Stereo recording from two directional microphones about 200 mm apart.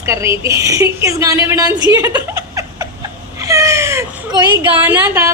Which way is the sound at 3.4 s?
15° right (ahead or behind).